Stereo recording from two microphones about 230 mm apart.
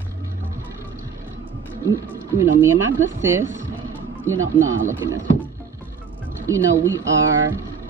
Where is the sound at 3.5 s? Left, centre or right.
Right.